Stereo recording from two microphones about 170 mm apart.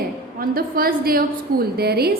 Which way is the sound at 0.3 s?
60° right (ahead or behind).